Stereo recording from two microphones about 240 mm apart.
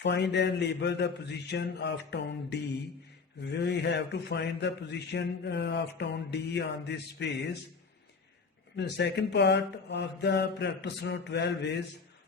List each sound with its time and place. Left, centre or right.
0.0 s a man's voice: left
8.7 s a man's voice: left